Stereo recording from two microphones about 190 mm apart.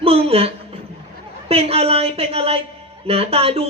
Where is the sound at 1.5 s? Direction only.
30° right (ahead or behind).